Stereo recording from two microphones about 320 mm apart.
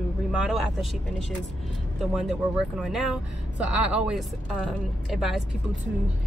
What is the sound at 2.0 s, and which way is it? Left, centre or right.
Speech, centre.